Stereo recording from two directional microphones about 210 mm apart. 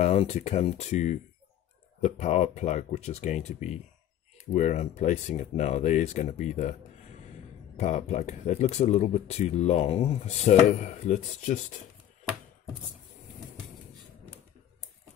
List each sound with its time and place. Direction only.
0.0 s speech: 30° left (ahead or behind)
7.7 s speech: 35° left (ahead or behind)